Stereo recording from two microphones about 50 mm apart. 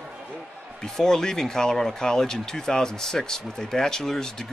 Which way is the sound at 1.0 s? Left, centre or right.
Centre.